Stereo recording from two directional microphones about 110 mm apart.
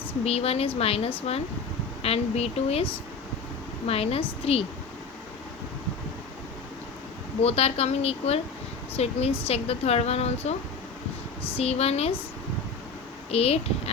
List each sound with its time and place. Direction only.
0.3 s speech: 65° left (ahead or behind)
7.4 s speech: 65° left (ahead or behind)
11.5 s speech: 70° left (ahead or behind)
13.3 s speech: 65° left (ahead or behind)